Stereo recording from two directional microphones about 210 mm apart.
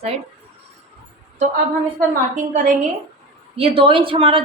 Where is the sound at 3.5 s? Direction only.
25° right (ahead or behind).